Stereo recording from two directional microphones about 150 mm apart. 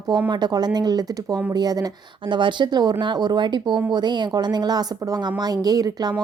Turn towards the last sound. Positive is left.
turn(degrees=-25)  # may be behind; listen again after turning